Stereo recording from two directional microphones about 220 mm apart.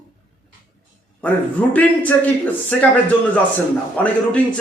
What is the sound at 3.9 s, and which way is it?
Speech, 5° left (ahead or behind).